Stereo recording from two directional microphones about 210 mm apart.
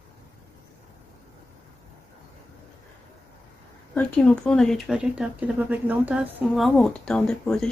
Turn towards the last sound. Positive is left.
turn(degrees=5)  # may be behind; listen again after turning